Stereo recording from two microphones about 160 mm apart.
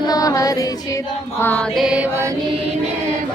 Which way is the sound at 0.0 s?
25° left (ahead or behind).